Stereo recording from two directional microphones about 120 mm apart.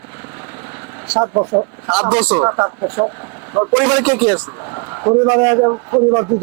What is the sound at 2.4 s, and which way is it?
A man's voice, 30° right (ahead or behind).